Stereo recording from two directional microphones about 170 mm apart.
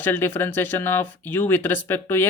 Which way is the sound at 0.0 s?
10° left (ahead or behind).